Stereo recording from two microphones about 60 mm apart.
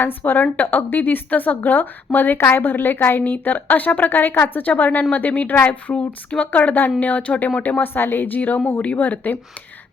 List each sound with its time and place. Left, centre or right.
0.0 s a woman's voice: left